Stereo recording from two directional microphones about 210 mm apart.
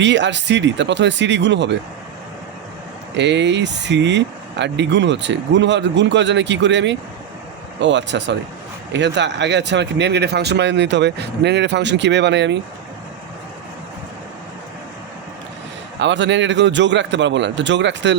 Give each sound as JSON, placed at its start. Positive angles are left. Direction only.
{"t": 0.0, "sound": "speech", "side_deg": -60}
{"t": 3.2, "sound": "speech", "side_deg": -55}
{"t": 16.0, "sound": "speech", "side_deg": -60}